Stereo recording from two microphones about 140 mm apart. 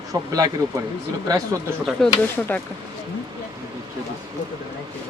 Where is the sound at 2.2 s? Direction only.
10° left (ahead or behind).